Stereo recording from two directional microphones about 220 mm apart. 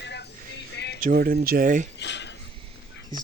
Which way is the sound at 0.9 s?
40° right (ahead or behind).